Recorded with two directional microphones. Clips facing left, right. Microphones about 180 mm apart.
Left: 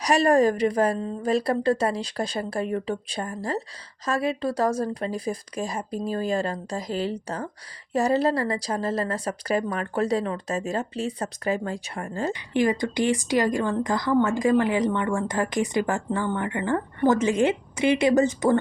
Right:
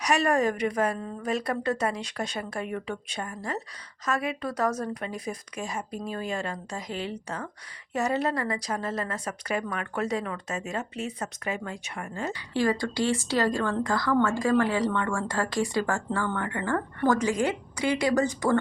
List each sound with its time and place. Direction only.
0.0 s a woman's voice: 35° left (ahead or behind)
12.3 s speech: 15° left (ahead or behind)